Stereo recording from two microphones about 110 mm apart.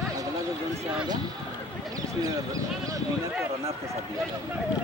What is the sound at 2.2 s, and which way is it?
Speech, 30° right (ahead or behind).